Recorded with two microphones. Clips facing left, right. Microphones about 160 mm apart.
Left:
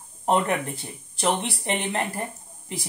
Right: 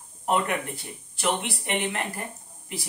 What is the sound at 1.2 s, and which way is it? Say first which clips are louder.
Speech: left 2 dB; 35° left (ahead or behind).